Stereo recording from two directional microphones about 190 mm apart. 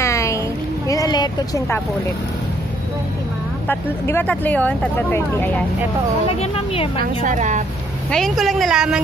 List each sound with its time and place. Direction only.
0.0 s a sound: 15° left (ahead or behind)
0.8 s vehicle: 20° left (ahead or behind)
3.6 s speech: 10° left (ahead or behind)
6.2 s speech: 30° left (ahead or behind)
7.0 s a woman's voice: 40° right (ahead or behind)
8.1 s a woman's voice: centre (ahead or behind)